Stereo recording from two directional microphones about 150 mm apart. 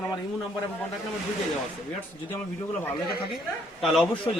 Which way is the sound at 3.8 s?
Centre (ahead or behind).